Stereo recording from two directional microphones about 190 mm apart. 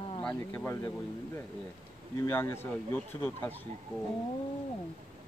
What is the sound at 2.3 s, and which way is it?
Speech, 10° left (ahead or behind).